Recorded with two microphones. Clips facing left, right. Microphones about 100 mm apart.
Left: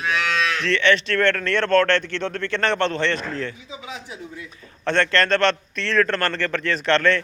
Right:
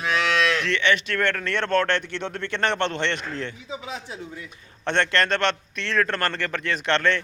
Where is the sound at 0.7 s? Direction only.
15° right (ahead or behind).